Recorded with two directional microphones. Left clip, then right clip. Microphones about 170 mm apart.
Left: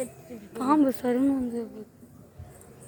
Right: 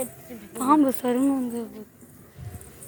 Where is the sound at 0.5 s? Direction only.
10° left (ahead or behind).